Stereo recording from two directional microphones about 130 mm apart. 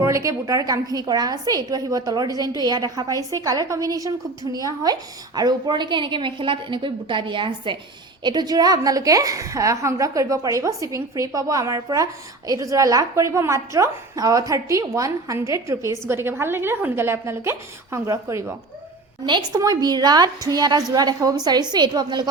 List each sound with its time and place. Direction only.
0.0 s a woman's voice: 25° right (ahead or behind)
19.2 s a woman's voice: 35° right (ahead or behind)